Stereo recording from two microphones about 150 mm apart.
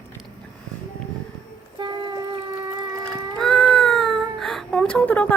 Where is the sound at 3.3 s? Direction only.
5° left (ahead or behind).